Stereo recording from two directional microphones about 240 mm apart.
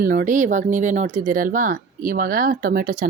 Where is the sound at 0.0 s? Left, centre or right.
Right.